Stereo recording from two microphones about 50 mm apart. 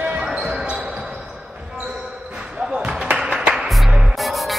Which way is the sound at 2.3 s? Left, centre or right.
Centre.